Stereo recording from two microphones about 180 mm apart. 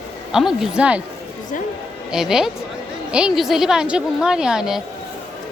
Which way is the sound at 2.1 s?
5° right (ahead or behind).